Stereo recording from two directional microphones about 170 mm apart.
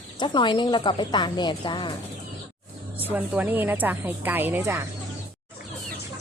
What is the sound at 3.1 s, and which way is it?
A woman's voice, 10° right (ahead or behind).